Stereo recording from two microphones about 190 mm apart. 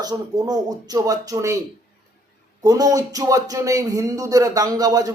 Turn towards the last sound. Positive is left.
turn(degrees=-20)  # may be behind; listen again after turning